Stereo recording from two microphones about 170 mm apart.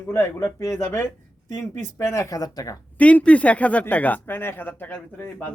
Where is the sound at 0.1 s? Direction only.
15° left (ahead or behind).